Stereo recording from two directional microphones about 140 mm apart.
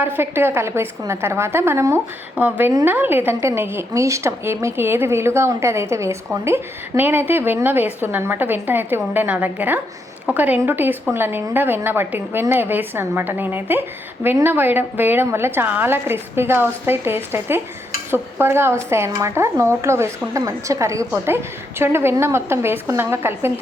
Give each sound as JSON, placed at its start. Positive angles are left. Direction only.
{"t": 0.0, "sound": "a woman's voice", "side_deg": -15}